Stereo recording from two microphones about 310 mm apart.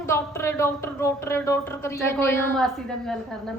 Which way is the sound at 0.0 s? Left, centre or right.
Centre.